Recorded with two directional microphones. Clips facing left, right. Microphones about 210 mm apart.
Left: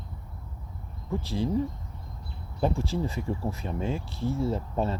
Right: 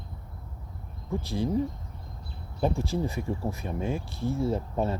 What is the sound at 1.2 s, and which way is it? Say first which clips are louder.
Speech: even; 15° right (ahead or behind).